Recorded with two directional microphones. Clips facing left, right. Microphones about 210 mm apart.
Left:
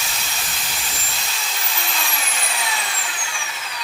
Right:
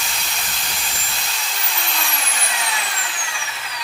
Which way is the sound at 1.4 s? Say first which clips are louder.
Even; centre (ahead or behind).